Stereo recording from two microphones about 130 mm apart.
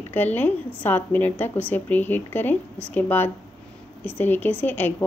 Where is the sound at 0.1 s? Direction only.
15° left (ahead or behind).